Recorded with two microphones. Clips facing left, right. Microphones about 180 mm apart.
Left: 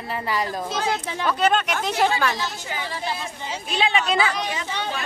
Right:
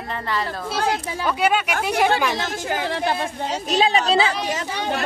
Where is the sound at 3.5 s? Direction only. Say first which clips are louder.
Right 4 dB; 40° right (ahead or behind).